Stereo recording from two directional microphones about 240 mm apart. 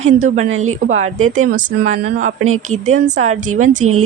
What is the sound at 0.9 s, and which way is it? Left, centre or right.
A woman's voice, right.